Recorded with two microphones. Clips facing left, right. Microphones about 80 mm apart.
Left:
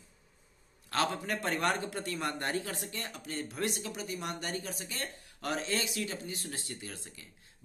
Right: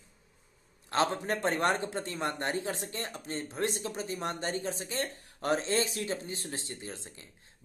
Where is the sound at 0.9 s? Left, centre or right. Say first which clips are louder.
Right 3 dB; right.